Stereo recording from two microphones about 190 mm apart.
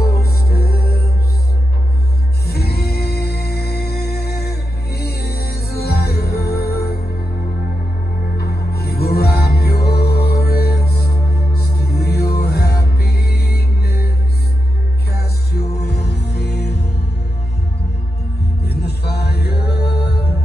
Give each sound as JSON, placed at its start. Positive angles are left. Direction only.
{"t": 0.2, "sound": "music", "side_deg": 55}
{"t": 2.4, "sound": "music", "side_deg": 55}
{"t": 8.4, "sound": "music", "side_deg": 55}
{"t": 15.1, "sound": "music", "side_deg": 55}
{"t": 18.6, "sound": "music", "side_deg": 60}